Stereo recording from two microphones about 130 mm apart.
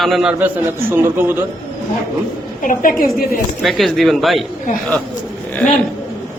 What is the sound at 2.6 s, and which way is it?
Speech, 90° left.